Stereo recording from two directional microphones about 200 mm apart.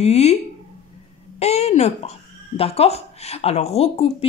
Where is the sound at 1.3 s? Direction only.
30° left (ahead or behind).